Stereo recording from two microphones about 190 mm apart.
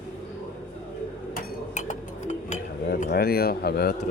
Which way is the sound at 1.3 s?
40° left (ahead or behind).